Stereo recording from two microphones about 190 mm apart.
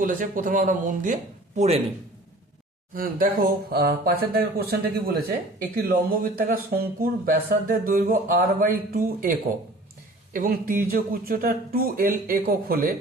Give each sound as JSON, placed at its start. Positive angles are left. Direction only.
{"t": 0.0, "sound": "speech", "side_deg": -45}
{"t": 2.9, "sound": "speech", "side_deg": -50}
{"t": 10.3, "sound": "speech", "side_deg": -45}